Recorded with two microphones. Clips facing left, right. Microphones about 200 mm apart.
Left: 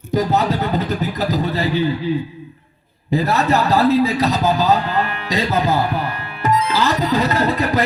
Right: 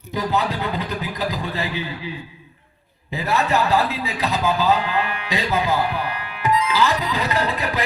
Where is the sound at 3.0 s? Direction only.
40° left (ahead or behind).